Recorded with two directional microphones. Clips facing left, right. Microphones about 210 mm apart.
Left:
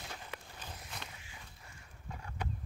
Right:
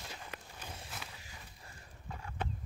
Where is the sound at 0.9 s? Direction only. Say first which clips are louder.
Left 2 dB; 5° right (ahead or behind).